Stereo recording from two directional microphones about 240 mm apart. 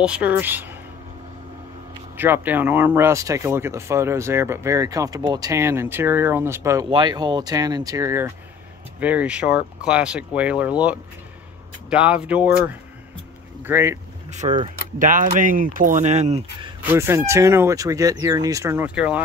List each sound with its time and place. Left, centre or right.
0.0 s speech: centre
2.1 s speech: centre
14.3 s speech: right
16.8 s speech: centre